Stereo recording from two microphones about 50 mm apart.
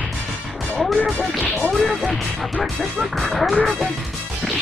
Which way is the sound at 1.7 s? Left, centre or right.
Centre.